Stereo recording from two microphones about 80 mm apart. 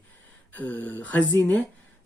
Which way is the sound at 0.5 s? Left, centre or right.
Left.